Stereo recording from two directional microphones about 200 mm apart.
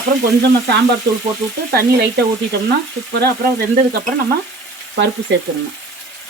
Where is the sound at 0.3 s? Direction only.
55° right (ahead or behind).